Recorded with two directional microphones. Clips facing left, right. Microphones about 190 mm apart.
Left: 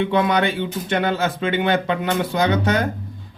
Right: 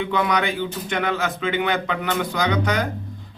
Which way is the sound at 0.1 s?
30° left (ahead or behind).